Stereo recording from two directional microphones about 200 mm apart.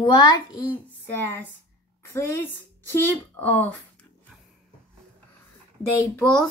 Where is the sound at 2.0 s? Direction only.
15° left (ahead or behind).